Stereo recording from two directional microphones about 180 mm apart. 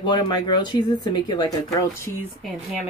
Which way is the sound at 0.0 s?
25° left (ahead or behind).